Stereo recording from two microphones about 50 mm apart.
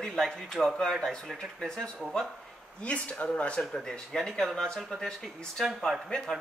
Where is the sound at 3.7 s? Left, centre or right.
Centre.